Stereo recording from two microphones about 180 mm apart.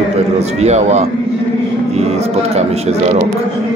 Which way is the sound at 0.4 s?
35° right (ahead or behind).